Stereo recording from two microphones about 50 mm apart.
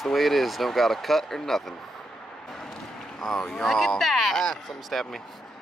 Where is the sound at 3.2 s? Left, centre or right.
Centre.